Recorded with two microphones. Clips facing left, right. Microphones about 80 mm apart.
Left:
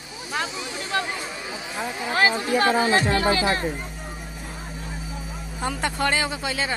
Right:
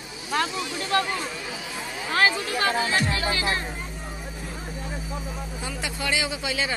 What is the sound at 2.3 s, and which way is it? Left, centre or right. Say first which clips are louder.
Speech: left 5 dB; left.